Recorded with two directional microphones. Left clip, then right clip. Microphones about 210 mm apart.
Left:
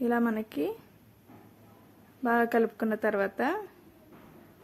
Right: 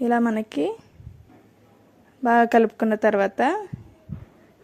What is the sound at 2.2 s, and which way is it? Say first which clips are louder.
Speech: right 9 dB; 30° right (ahead or behind).